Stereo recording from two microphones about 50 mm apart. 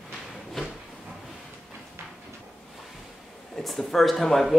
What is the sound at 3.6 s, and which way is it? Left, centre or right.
Speech, centre.